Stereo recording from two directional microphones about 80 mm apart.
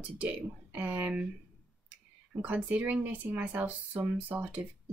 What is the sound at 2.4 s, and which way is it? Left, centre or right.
Speech, centre.